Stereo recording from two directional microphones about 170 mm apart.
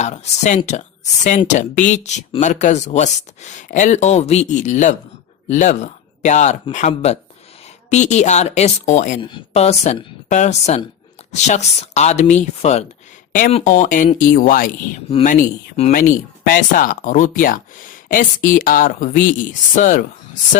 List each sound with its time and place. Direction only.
0.0 s speech: 45° left (ahead or behind)